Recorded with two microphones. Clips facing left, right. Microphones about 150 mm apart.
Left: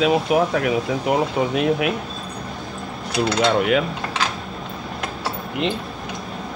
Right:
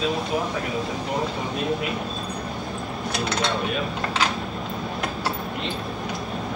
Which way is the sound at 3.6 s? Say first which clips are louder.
Left 8 dB; 90° left.